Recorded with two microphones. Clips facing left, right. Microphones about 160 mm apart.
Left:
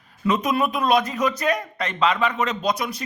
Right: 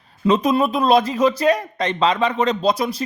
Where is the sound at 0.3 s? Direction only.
30° right (ahead or behind).